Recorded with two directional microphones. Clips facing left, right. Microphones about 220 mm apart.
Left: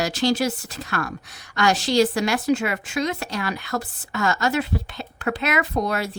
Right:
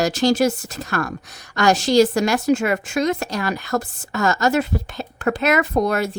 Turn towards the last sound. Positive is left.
turn(degrees=-45)  # may be behind; listen again after turning